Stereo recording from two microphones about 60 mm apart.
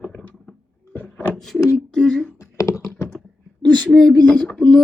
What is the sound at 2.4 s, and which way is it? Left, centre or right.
Computer keyboard, left.